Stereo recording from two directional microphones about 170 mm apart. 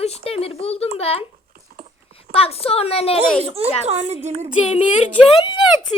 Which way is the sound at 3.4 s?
35° right (ahead or behind).